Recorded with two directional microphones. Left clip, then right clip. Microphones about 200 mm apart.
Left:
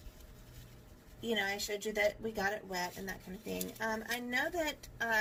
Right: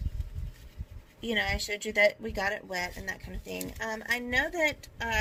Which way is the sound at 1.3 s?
55° right (ahead or behind).